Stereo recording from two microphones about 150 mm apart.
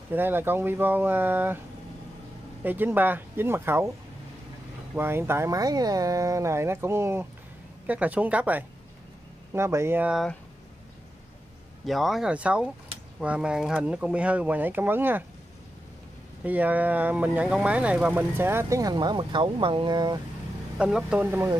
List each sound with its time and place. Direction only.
0.1 s speech: 15° right (ahead or behind)
2.6 s speech: 10° right (ahead or behind)
4.9 s speech: 15° right (ahead or behind)
11.8 s speech: centre (ahead or behind)
16.4 s speech: 10° right (ahead or behind); by 20.2 s 30° right (ahead or behind)
20.7 s speech: 5° right (ahead or behind)